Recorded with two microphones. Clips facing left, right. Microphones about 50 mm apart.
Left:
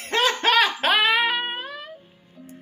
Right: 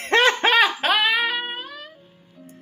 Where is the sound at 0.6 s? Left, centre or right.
Centre.